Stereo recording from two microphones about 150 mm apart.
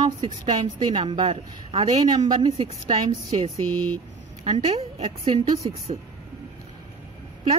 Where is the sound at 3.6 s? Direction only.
10° left (ahead or behind).